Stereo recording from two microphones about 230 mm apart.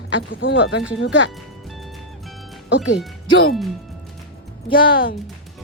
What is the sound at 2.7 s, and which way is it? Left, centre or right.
Speech, left.